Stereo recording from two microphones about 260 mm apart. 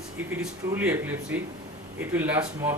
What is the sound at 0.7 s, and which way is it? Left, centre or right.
Speech, centre.